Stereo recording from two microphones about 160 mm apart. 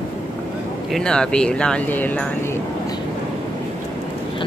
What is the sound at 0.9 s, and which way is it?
Speech, 5° left (ahead or behind).